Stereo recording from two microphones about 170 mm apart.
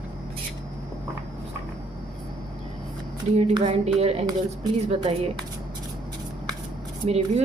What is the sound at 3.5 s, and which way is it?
Speech, 40° right (ahead or behind).